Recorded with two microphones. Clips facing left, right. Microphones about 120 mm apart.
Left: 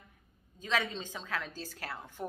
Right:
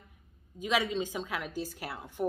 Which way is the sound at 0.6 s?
10° right (ahead or behind).